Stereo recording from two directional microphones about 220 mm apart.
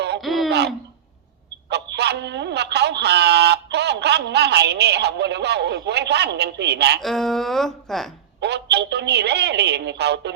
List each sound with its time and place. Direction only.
0.2 s a sound: centre (ahead or behind)
1.7 s speech: 50° right (ahead or behind)
7.0 s speech: centre (ahead or behind)
8.4 s a woman's voice: 50° right (ahead or behind)